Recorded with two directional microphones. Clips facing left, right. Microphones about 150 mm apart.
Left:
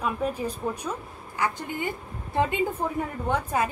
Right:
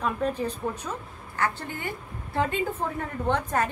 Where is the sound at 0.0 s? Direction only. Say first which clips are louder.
Right 1 dB; 10° left (ahead or behind).